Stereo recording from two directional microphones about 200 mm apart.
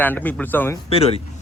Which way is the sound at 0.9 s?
30° left (ahead or behind).